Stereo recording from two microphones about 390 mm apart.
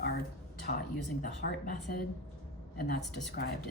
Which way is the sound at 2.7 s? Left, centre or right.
Left.